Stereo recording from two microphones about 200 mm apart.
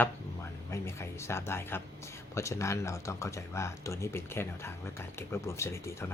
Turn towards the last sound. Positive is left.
turn(degrees=15)  # may be behind; listen again after turning